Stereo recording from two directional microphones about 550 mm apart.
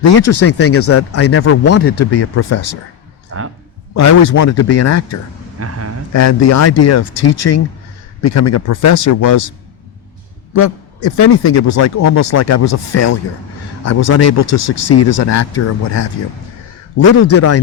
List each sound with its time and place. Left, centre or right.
0.0 s speech: left
3.3 s speech: right
3.9 s speech: left
5.5 s a sound: right
6.1 s speech: left
10.5 s speech: left